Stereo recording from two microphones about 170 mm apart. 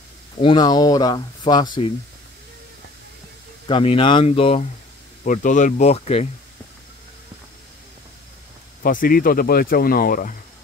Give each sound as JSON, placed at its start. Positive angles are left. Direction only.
{"t": 0.4, "sound": "speech", "side_deg": 25}
{"t": 3.6, "sound": "speech", "side_deg": 30}
{"t": 5.2, "sound": "speech", "side_deg": 50}
{"t": 8.8, "sound": "speech", "side_deg": 55}